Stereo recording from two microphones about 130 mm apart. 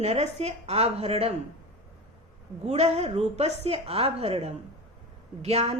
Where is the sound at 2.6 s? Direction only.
55° right (ahead or behind).